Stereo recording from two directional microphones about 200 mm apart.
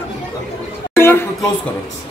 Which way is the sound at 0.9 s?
10° left (ahead or behind).